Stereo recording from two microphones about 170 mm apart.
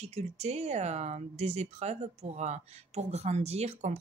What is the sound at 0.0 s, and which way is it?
Speech, 40° right (ahead or behind).